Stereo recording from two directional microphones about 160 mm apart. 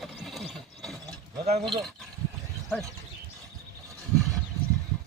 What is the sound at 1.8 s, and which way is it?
Speech, centre (ahead or behind).